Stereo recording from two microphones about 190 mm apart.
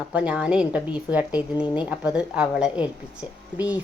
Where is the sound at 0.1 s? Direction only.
5° right (ahead or behind).